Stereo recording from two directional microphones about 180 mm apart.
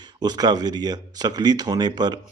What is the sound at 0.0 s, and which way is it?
Speech, 25° right (ahead or behind).